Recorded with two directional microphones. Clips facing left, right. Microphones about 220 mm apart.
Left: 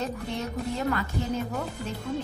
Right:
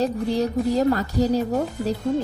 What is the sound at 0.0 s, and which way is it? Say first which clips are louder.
A woman's voice: right 10 dB; 35° right (ahead or behind).